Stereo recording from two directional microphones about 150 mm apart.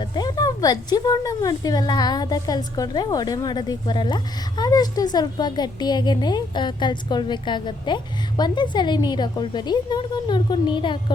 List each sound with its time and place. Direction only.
0.0 s a woman's voice: 30° left (ahead or behind)